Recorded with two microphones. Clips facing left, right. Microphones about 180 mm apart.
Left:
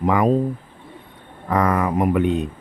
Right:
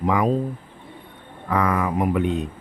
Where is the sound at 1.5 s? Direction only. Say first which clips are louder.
Left 2 dB; 40° left (ahead or behind).